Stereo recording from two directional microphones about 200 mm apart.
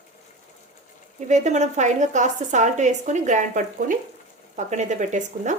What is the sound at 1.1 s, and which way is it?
A woman's voice, 35° right (ahead or behind).